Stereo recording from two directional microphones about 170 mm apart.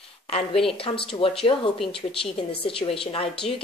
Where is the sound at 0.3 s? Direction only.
30° left (ahead or behind).